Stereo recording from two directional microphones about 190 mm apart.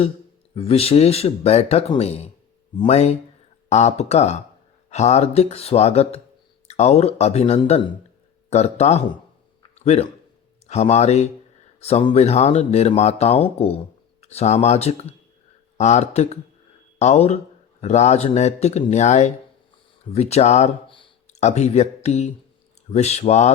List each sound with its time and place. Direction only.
0.5 s a man's voice: 30° left (ahead or behind)